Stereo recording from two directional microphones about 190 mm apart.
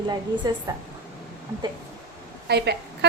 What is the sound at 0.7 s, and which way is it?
Speech, 20° right (ahead or behind).